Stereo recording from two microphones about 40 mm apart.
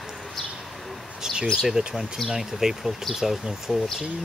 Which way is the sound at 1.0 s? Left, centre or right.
Centre.